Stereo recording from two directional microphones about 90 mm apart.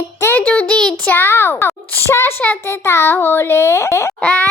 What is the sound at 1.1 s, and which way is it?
A child's voice, 25° left (ahead or behind).